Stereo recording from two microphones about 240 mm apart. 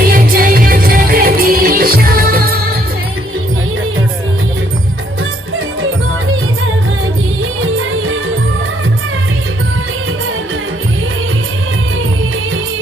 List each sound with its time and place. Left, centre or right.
0.1 s music: right
7.6 s music: right